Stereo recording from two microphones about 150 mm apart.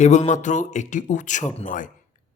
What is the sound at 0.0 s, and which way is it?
A man's voice, 50° left (ahead or behind).